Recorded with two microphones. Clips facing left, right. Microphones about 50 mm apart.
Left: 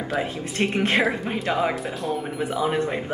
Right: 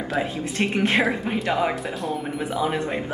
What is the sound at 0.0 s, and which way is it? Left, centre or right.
Speech, centre.